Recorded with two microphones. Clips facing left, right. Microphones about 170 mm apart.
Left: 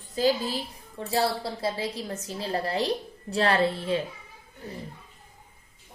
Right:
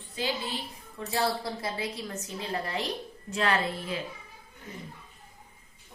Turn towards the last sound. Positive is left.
turn(degrees=35)  # may be behind; listen again after turning